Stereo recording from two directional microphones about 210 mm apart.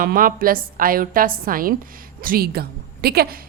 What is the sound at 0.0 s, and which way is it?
A woman's voice, 45° right (ahead or behind).